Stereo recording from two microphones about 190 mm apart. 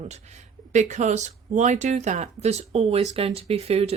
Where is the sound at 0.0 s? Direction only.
35° right (ahead or behind).